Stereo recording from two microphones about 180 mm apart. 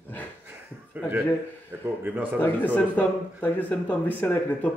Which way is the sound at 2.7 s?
10° left (ahead or behind).